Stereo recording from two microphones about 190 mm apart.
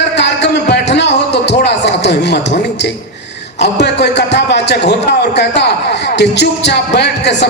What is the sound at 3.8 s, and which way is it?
Speech, 65° left (ahead or behind).